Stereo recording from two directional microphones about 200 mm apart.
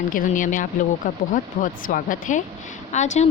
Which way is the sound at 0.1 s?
40° left (ahead or behind).